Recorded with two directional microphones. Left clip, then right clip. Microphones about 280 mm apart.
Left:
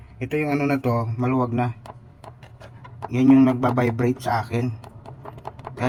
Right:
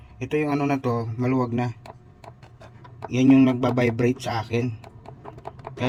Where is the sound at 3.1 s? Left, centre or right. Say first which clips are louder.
Left 1 dB; centre.